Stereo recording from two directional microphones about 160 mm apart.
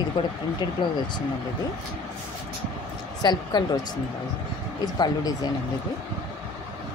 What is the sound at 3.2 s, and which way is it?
Speech, 25° left (ahead or behind).